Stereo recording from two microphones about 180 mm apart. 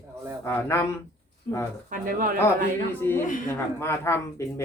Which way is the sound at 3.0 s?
10° left (ahead or behind).